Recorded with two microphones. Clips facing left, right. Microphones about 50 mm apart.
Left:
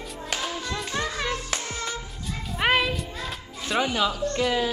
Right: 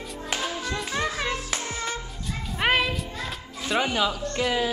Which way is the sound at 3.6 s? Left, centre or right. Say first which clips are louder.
Even; centre.